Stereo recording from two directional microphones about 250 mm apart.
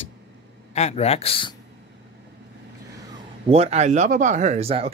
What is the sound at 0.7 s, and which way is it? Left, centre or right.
Speech, left.